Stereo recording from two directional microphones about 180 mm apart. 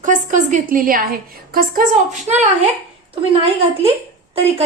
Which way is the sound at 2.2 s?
40° right (ahead or behind).